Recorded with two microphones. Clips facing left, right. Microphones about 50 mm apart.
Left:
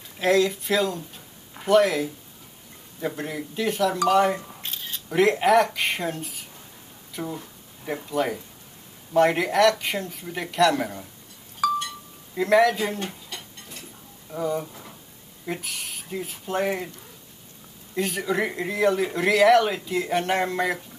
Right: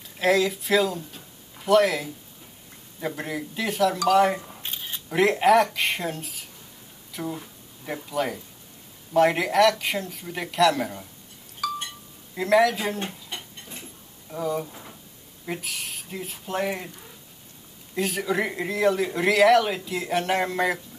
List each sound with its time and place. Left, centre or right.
0.2 s speech: centre
3.2 s speech: centre
4.6 s camera: centre
5.1 s speech: centre
12.4 s speech: centre
13.0 s a sound: right
14.3 s speech: centre
14.7 s drawer open or close: centre
15.4 s speech: centre
17.9 s speech: centre